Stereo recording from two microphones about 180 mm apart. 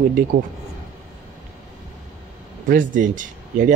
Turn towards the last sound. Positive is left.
turn(degrees=-45)  # may be behind; listen again after turning